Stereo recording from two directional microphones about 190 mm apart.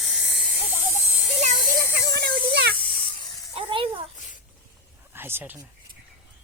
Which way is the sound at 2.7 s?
30° left (ahead or behind).